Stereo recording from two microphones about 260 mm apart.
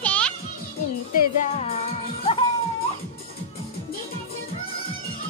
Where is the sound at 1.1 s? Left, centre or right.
Left.